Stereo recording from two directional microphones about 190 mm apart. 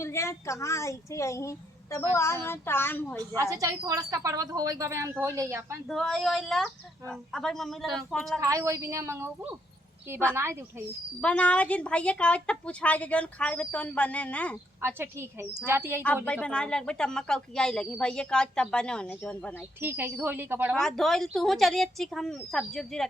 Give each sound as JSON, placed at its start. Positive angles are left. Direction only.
{"t": 0.0, "sound": "a woman's voice", "side_deg": 15}
{"t": 3.6, "sound": "speech", "side_deg": -15}
{"t": 5.9, "sound": "speech", "side_deg": 0}
{"t": 8.4, "sound": "speech", "side_deg": -15}
{"t": 11.2, "sound": "a woman's voice", "side_deg": 5}
{"t": 14.8, "sound": "speech", "side_deg": -10}
{"t": 16.2, "sound": "speech", "side_deg": 5}
{"t": 19.8, "sound": "speech", "side_deg": -10}
{"t": 20.7, "sound": "speech", "side_deg": 5}